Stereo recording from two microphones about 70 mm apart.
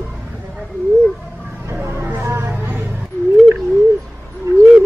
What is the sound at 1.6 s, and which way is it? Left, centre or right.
Vehicle, right.